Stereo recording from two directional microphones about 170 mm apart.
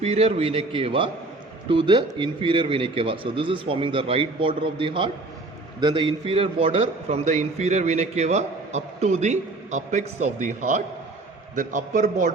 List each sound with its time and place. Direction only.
0.0 s a man's voice: 35° right (ahead or behind)